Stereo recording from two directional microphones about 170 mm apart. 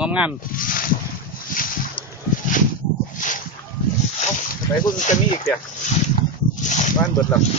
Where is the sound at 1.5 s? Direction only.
50° left (ahead or behind).